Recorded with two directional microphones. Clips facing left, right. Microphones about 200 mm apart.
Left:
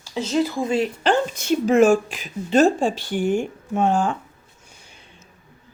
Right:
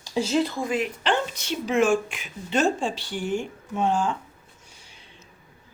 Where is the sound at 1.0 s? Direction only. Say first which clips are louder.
Left 5 dB; 45° left (ahead or behind).